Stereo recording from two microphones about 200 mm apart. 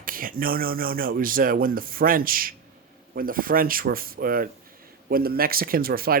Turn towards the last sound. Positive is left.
turn(degrees=-50)  # may be behind; listen again after turning